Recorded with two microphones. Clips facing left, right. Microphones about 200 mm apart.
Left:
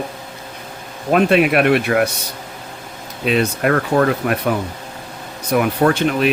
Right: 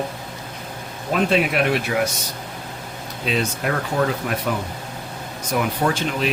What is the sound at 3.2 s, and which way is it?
Speech, 60° left (ahead or behind).